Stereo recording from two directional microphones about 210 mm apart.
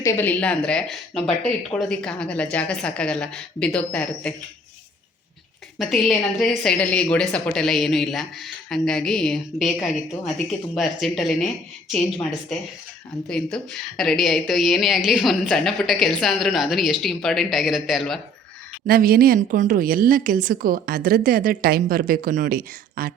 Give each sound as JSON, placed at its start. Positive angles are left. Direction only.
{"t": 0.0, "sound": "a woman's voice", "side_deg": 10}
{"t": 5.8, "sound": "a woman's voice", "side_deg": 0}
{"t": 18.9, "sound": "a woman's voice", "side_deg": -45}